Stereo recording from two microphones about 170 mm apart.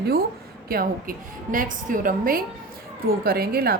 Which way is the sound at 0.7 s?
60° right (ahead or behind).